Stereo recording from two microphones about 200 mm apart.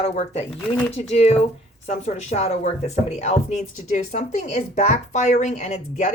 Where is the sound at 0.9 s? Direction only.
35° left (ahead or behind).